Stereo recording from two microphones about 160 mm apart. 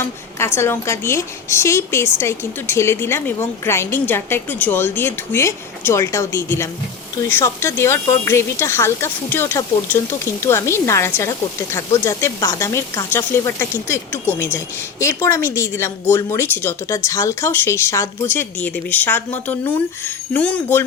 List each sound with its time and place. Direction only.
0.0 s speech: 15° left (ahead or behind)